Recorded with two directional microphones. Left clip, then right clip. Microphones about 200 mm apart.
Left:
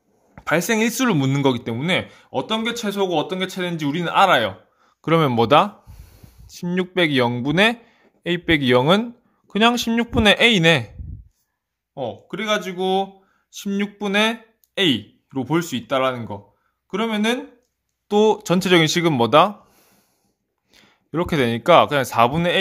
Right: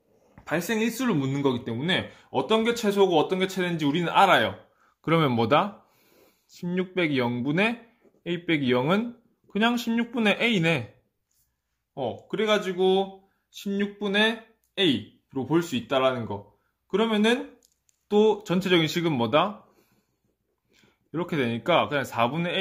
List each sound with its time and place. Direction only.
0.3 s speech: 45° left (ahead or behind); by 10.9 s 25° left (ahead or behind)
11.9 s speech: 25° left (ahead or behind)
20.7 s speech: 30° left (ahead or behind)